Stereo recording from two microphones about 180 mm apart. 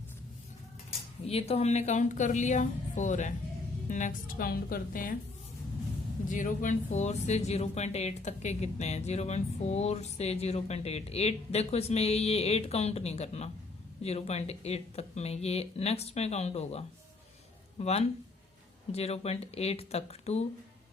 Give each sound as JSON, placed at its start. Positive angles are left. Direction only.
{"t": 0.9, "sound": "speech", "side_deg": 35}
{"t": 6.2, "sound": "speech", "side_deg": 45}